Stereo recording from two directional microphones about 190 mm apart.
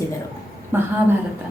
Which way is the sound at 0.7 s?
10° right (ahead or behind).